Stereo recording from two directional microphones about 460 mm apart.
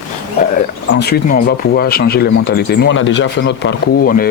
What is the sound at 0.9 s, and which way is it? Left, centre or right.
Speech, centre.